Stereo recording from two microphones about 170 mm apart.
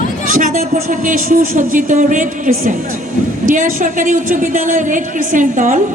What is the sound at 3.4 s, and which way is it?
A woman's voice, 50° right (ahead or behind).